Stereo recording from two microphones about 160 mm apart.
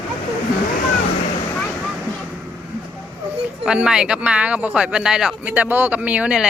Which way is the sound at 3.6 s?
5° right (ahead or behind).